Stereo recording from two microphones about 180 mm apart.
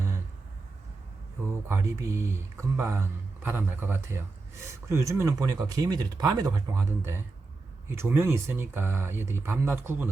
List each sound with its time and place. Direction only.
1.6 s speech: 15° right (ahead or behind)